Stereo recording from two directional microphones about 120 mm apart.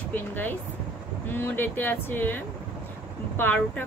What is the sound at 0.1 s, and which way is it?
Speech, 15° left (ahead or behind).